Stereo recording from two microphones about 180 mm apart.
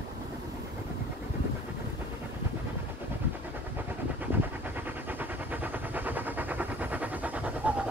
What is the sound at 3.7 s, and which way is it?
Vehicle, 10° right (ahead or behind).